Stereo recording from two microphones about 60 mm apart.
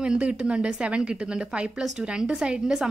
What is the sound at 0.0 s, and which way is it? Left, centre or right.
A woman's voice, centre.